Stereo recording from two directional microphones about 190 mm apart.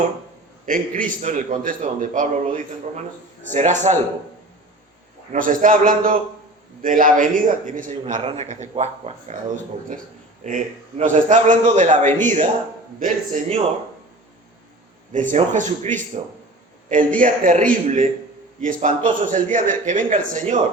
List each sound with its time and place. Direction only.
0.6 s a man's voice: 45° right (ahead or behind)
5.3 s a man's voice: 45° right (ahead or behind)
10.4 s a man's voice: 40° right (ahead or behind)
15.1 s a man's voice: 40° right (ahead or behind)